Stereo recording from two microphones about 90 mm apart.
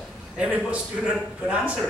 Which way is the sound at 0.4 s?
15° right (ahead or behind).